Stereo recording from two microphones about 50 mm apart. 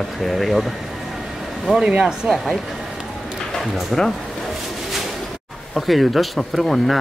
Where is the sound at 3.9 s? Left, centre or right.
Centre.